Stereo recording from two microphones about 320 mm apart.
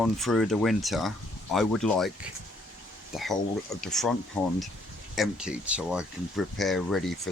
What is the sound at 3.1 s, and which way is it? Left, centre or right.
Speech, centre.